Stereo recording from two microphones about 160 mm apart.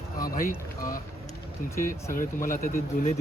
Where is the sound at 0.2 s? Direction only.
65° left (ahead or behind).